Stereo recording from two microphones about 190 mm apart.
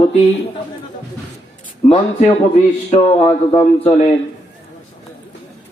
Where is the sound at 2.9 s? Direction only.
30° left (ahead or behind).